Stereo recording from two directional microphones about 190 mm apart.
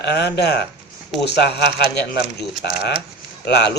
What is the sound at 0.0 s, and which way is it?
A man's voice, 60° left (ahead or behind).